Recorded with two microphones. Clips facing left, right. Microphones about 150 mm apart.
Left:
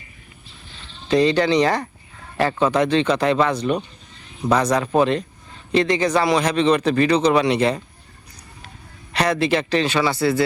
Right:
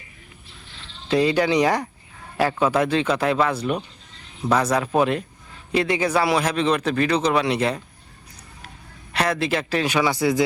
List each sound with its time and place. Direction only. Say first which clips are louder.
1.0 s speech: left 2 dB; 5° right (ahead or behind)
9.1 s speech: left 3 dB; centre (ahead or behind)